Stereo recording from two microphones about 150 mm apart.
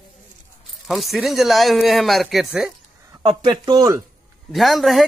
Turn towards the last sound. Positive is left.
turn(degrees=0)  # may be behind; listen again after turning